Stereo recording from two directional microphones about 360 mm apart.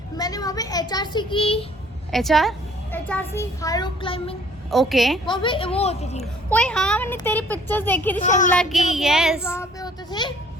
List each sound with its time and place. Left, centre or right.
0.2 s speech: centre
2.0 s a woman's voice: centre
4.7 s a woman's voice: centre
5.2 s speech: centre
6.5 s a woman's voice: centre
8.2 s child singing: left
8.9 s speech: centre